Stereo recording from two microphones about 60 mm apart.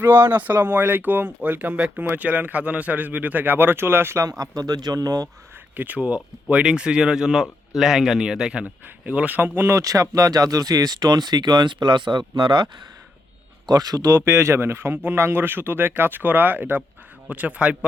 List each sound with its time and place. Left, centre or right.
0.0 s speech: right
4.2 s speech: right
5.7 s speech: right; by 8.6 s centre
9.0 s speech: right
9.6 s speech: right
13.7 s speech: right